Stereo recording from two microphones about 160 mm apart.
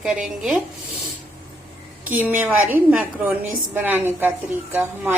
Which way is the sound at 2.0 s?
10° right (ahead or behind).